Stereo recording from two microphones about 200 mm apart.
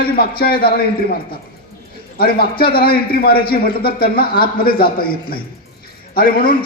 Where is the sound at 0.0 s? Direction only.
50° left (ahead or behind).